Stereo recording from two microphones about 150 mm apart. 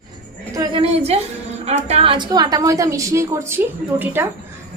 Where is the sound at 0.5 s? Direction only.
25° right (ahead or behind).